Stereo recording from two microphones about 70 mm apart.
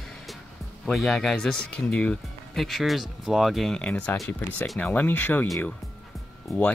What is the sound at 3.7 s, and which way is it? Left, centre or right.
Speech, centre.